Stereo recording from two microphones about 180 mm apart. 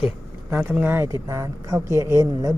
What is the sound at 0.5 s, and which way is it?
Speech, 10° right (ahead or behind).